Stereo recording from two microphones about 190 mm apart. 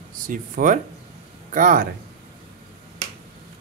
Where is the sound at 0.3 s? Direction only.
45° right (ahead or behind).